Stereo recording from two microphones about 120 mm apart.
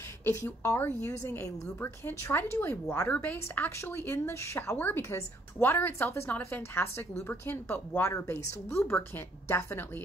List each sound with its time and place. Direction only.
0.2 s a woman's voice: 20° left (ahead or behind)